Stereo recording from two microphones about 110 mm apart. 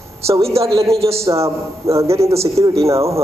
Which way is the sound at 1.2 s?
25° right (ahead or behind).